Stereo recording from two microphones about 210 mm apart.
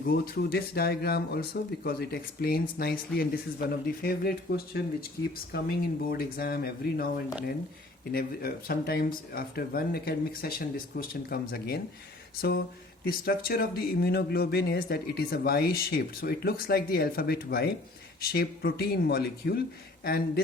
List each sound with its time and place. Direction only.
0.0 s speech: 45° left (ahead or behind)
6.1 s speech: 45° left (ahead or behind)